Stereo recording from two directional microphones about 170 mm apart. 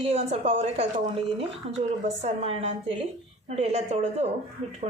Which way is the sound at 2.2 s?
35° right (ahead or behind).